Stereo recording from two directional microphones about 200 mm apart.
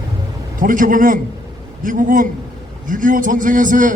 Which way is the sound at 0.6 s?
40° right (ahead or behind).